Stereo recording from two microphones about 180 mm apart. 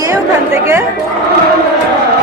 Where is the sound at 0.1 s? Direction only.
15° right (ahead or behind).